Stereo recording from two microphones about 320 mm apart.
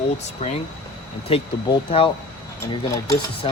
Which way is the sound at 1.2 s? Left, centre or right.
Centre.